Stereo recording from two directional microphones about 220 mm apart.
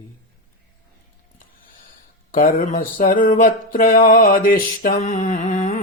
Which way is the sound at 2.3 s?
40° left (ahead or behind).